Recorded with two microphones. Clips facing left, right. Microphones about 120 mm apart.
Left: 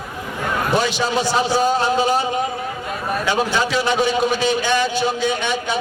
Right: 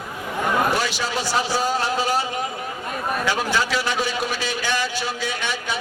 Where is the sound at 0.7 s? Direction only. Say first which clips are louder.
Left 5 dB; 20° left (ahead or behind).